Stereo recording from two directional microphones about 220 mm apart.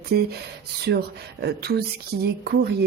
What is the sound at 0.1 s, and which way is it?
Speech, 45° right (ahead or behind).